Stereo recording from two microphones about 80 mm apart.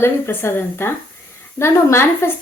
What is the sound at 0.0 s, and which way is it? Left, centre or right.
A woman's voice, left.